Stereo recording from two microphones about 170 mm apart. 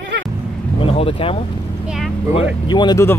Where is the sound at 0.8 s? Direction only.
35° left (ahead or behind).